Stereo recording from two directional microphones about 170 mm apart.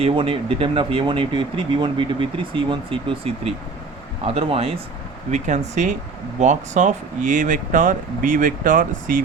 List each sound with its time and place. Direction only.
0.0 s speech: 35° right (ahead or behind); by 9.2 s 55° right (ahead or behind)